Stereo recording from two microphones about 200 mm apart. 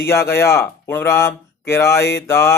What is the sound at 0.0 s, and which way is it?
Speech, 10° left (ahead or behind).